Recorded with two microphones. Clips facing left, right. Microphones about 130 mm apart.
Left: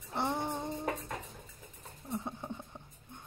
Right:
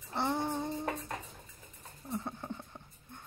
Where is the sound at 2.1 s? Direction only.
10° left (ahead or behind).